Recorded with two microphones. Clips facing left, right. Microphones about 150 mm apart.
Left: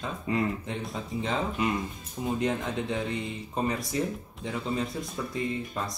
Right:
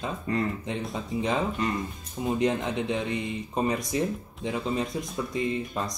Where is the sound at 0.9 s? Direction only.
15° right (ahead or behind).